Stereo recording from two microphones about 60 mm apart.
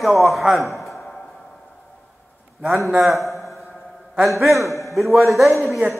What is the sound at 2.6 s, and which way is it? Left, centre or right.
A man's voice, centre.